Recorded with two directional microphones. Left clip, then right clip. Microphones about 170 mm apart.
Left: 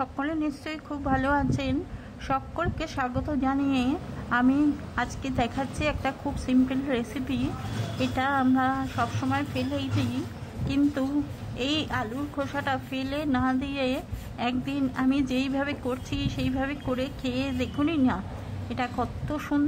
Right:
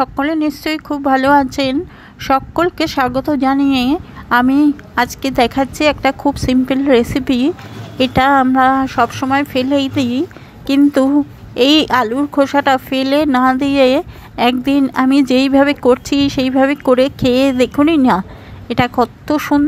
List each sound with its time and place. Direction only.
0.0 s a woman's voice: 35° right (ahead or behind)